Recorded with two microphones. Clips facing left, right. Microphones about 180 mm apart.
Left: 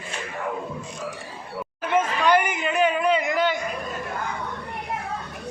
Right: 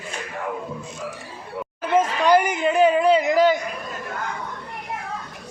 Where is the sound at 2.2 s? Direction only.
35° right (ahead or behind).